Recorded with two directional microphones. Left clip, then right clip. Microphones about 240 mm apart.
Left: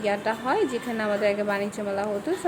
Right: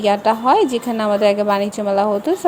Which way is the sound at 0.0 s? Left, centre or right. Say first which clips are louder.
Right 11 dB; right.